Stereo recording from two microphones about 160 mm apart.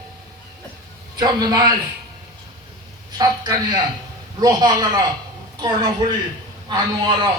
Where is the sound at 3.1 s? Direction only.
25° right (ahead or behind).